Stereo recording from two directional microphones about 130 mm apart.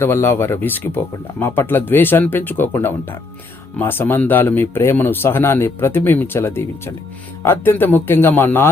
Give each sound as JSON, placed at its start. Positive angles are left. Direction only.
{"t": 0.0, "sound": "speech", "side_deg": 20}